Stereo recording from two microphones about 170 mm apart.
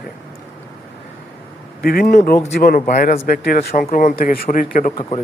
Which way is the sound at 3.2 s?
55° left (ahead or behind).